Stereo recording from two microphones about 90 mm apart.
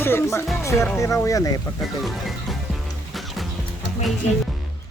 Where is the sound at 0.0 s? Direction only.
25° left (ahead or behind).